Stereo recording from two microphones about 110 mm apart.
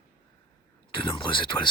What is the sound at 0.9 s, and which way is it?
Speech, 50° left (ahead or behind).